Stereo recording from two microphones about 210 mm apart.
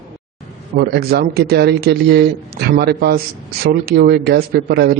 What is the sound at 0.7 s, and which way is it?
Speech, 50° right (ahead or behind).